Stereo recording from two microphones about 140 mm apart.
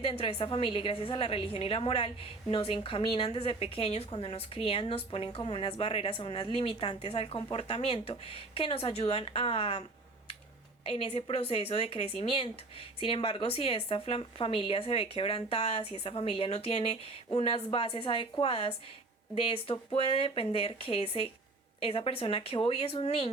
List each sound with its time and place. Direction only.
0.0 s a woman's voice: 40° left (ahead or behind)
10.8 s a woman's voice: 40° left (ahead or behind)